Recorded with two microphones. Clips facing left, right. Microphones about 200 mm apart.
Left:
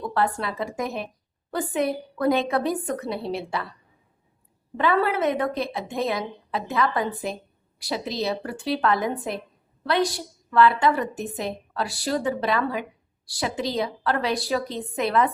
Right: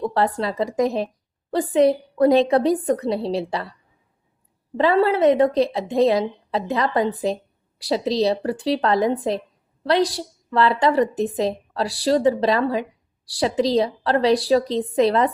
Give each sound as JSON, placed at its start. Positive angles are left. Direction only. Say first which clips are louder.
{"t": 0.0, "sound": "a woman's voice", "louder": "right 4 dB", "side_deg": -35}
{"t": 4.8, "sound": "a woman's voice", "louder": "right 5 dB", "side_deg": -30}